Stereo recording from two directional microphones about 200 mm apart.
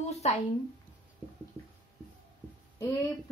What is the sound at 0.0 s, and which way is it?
Speech, 35° left (ahead or behind).